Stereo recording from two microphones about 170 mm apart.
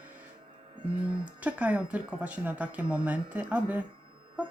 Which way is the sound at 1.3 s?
10° right (ahead or behind).